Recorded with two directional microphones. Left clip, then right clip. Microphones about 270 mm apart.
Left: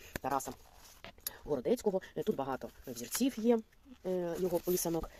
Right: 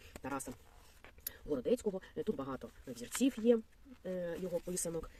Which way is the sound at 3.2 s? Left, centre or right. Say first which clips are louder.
Even; left.